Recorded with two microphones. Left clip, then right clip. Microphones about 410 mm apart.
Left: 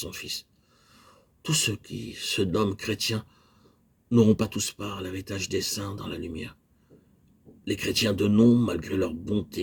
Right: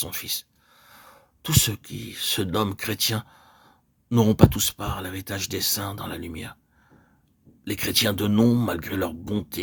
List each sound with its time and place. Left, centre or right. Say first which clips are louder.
0.0 s a sound: right 3 dB; right
1.4 s speech: right 2 dB; right
7.6 s speech: right 3 dB; right